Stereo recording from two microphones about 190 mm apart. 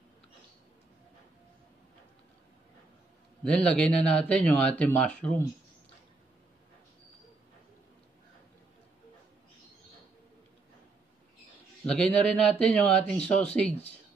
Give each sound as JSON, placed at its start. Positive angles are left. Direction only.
{"t": 3.4, "sound": "a man's voice", "side_deg": 5}
{"t": 11.8, "sound": "speech", "side_deg": 5}